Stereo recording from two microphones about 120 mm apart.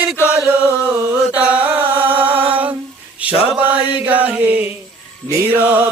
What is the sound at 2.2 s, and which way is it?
Mantra, 50° right (ahead or behind).